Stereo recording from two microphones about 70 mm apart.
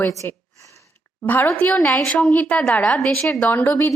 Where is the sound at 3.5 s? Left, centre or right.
Left.